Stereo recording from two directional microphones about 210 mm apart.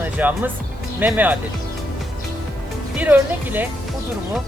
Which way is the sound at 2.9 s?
10° right (ahead or behind).